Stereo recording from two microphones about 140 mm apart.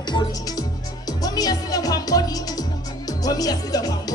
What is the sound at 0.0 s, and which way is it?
Music, 30° left (ahead or behind).